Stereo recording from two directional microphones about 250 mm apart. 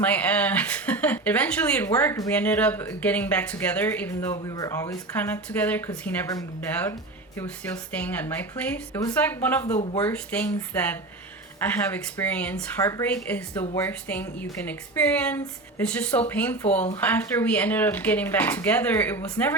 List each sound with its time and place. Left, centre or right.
0.0 s speech: centre
9.7 s speech: left
10.0 s speech: centre